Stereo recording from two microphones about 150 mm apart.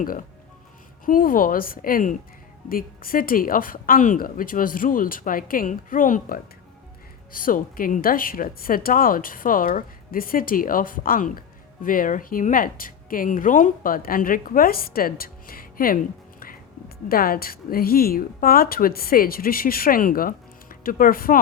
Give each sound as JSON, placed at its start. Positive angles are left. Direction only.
{"t": 1.0, "sound": "a woman's voice", "side_deg": 70}
{"t": 17.1, "sound": "a woman's voice", "side_deg": 80}